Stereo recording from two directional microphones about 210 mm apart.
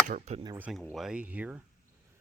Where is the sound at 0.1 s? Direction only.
35° right (ahead or behind).